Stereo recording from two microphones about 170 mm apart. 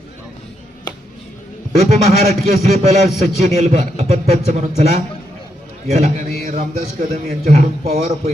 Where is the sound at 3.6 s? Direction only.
40° right (ahead or behind).